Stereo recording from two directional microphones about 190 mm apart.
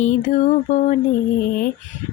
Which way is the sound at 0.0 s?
40° left (ahead or behind).